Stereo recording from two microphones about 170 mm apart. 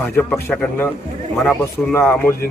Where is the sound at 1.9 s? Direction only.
15° left (ahead or behind).